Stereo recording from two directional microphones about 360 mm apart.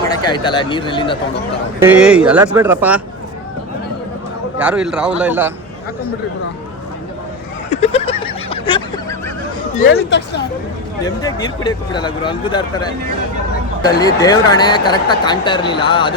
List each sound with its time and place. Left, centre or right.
0.1 s speech: centre
1.8 s speech: centre
4.5 s speech: centre
7.7 s a sound: centre
9.7 s speech: left
11.0 s speech: centre